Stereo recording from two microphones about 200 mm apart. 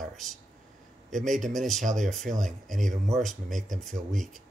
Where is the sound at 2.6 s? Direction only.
40° right (ahead or behind).